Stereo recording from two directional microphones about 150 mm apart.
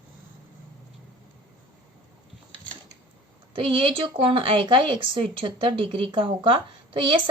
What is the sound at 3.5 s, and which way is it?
A woman's voice, 35° right (ahead or behind).